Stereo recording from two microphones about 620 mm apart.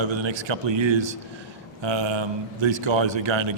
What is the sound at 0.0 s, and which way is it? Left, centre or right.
A man's voice, right.